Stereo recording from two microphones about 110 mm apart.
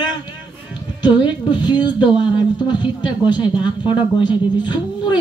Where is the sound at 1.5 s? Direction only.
40° left (ahead or behind).